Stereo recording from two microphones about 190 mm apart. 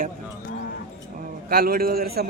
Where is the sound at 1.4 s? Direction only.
50° right (ahead or behind).